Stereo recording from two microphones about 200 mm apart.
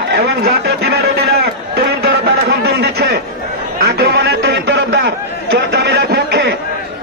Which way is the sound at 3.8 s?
55° right (ahead or behind).